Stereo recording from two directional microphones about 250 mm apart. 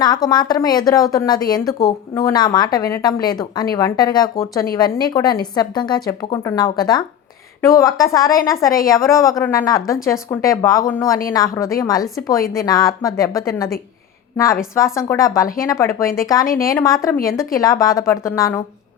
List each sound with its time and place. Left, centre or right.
0.0 s a woman's voice: centre
14.8 s a woman's voice: centre